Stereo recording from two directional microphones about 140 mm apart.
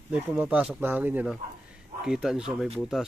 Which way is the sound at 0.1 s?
10° right (ahead or behind).